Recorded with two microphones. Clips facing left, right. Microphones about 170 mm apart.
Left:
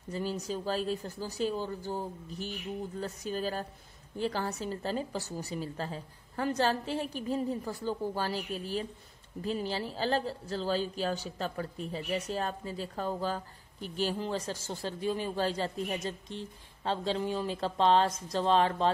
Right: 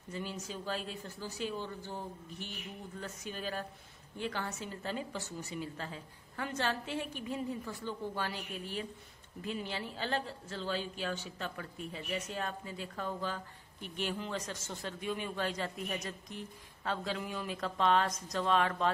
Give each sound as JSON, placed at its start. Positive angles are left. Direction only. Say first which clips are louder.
{"t": 0.1, "sound": "a woman's voice", "louder": "left 7 dB", "side_deg": 35}